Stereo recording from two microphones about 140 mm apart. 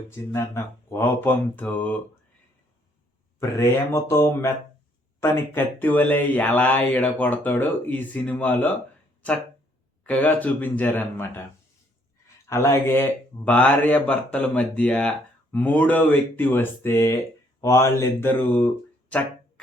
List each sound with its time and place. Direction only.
0.1 s speech: 20° left (ahead or behind)
3.6 s speech: 20° left (ahead or behind)
10.0 s speech: 10° left (ahead or behind)
12.5 s speech: 20° left (ahead or behind)